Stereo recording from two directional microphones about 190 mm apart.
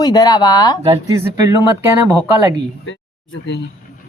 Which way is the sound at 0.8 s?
15° right (ahead or behind).